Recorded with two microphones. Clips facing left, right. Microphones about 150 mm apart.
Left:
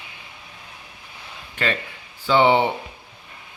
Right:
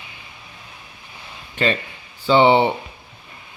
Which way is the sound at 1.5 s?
20° right (ahead or behind).